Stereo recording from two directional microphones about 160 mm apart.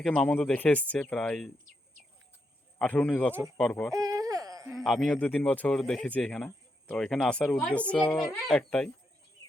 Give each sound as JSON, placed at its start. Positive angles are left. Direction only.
{"t": 0.0, "sound": "speech", "side_deg": 5}
{"t": 2.7, "sound": "speech", "side_deg": 10}
{"t": 3.9, "sound": "a sound", "side_deg": -20}
{"t": 4.7, "sound": "speech", "side_deg": 0}